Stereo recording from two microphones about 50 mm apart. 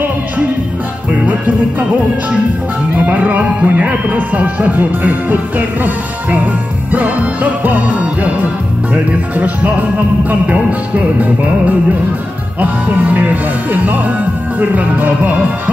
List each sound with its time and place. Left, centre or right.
3.1 s speech: right
7.6 s music: right
8.9 s speech: right
13.1 s speech: right
14.6 s speech: right